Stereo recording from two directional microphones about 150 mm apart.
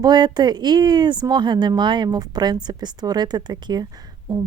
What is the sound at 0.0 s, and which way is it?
Speech, 30° right (ahead or behind).